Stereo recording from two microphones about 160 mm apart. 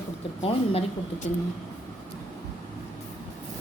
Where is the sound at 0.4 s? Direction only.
40° left (ahead or behind).